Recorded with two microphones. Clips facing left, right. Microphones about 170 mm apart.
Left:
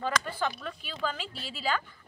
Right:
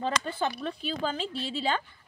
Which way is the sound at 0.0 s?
25° right (ahead or behind).